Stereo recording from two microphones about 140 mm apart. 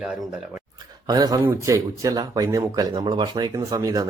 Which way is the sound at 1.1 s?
30° right (ahead or behind).